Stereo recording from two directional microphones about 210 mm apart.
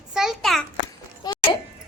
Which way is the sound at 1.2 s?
20° left (ahead or behind).